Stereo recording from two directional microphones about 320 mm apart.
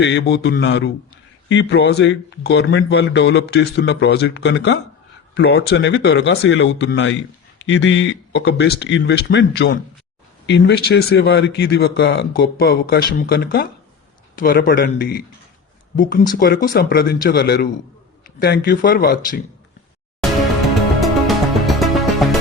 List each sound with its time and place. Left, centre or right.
0.0 s a man's voice: left
16.3 s speech: left
21.0 s music: centre